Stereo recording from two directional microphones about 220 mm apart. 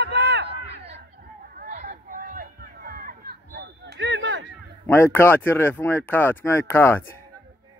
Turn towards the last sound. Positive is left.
turn(degrees=10)  # may be behind; listen again after turning